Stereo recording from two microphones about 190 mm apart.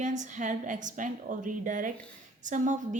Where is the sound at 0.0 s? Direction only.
40° right (ahead or behind).